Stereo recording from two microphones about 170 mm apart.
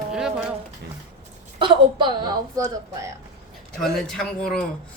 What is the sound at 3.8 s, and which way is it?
Speech, 5° left (ahead or behind).